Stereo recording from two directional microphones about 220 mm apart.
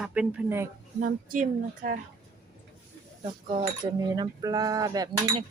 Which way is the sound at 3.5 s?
25° right (ahead or behind).